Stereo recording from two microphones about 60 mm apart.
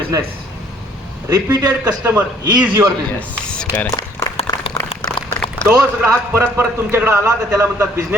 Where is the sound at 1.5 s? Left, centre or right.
Right.